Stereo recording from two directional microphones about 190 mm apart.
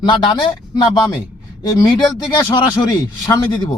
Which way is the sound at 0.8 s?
20° left (ahead or behind).